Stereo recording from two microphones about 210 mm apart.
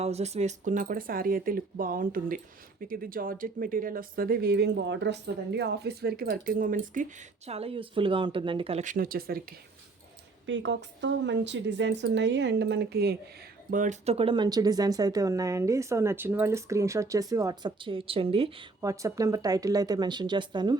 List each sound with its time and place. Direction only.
0.0 s speech: 30° right (ahead or behind)
10.4 s a woman's voice: 60° right (ahead or behind)
13.7 s speech: 40° right (ahead or behind)
18.9 s speech: 15° right (ahead or behind)